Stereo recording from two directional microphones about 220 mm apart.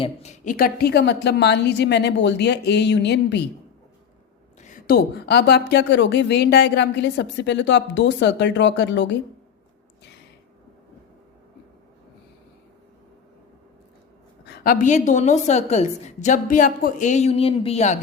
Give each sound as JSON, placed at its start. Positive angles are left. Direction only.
{"t": 0.0, "sound": "speech", "side_deg": 30}
{"t": 4.6, "sound": "speech", "side_deg": 40}
{"t": 14.4, "sound": "a woman's voice", "side_deg": 45}